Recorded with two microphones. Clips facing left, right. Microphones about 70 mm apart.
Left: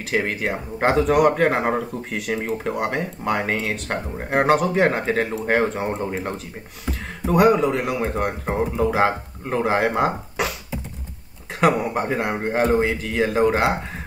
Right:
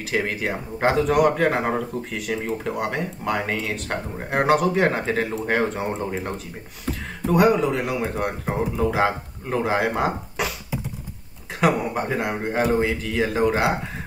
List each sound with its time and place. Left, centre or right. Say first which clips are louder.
0.3 s speech: left 1 dB; centre
11.6 s speech: left 2 dB; centre